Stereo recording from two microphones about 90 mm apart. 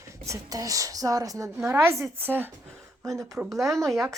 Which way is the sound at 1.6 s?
30° right (ahead or behind).